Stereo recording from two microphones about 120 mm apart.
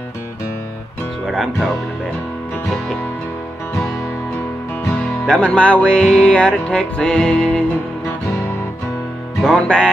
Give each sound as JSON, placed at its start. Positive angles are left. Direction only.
{"t": 1.2, "sound": "speech", "side_deg": 0}
{"t": 4.9, "sound": "music", "side_deg": 10}
{"t": 9.4, "sound": "music", "side_deg": 5}